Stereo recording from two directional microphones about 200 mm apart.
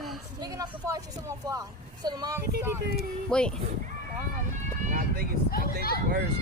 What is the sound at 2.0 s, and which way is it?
Speech, 20° right (ahead or behind).